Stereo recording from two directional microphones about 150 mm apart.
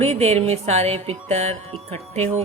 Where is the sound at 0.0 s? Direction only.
45° right (ahead or behind).